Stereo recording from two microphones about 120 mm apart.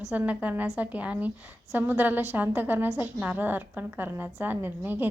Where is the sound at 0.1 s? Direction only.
10° right (ahead or behind).